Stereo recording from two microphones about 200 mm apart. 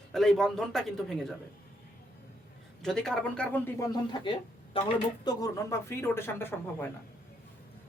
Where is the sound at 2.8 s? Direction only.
Centre (ahead or behind); by 4.9 s 25° left (ahead or behind).